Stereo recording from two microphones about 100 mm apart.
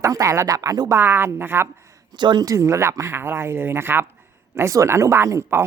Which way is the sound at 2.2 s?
45° right (ahead or behind).